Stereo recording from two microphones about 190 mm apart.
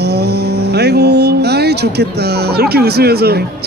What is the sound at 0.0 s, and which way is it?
Speech, 60° right (ahead or behind).